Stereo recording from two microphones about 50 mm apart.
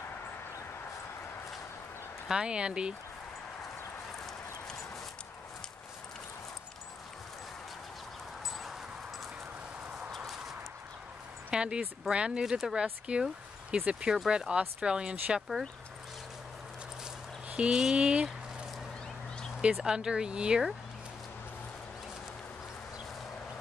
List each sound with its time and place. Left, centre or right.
2.2 s speech: centre
8.5 s clip-clop: centre
11.5 s a sound: centre
12.1 s speech: centre
17.5 s speech: right
19.7 s speech: centre